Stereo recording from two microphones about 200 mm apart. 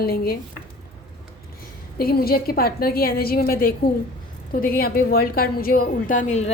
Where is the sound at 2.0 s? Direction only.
50° left (ahead or behind).